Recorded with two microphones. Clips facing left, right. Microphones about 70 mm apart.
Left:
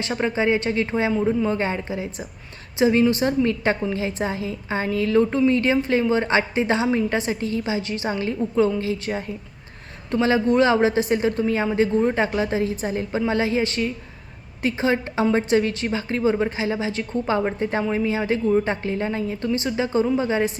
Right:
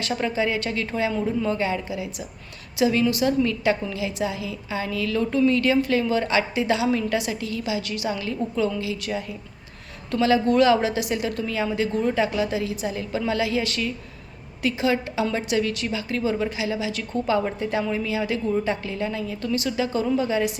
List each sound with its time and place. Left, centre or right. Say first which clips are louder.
0.0 s a woman's voice: left 2 dB; left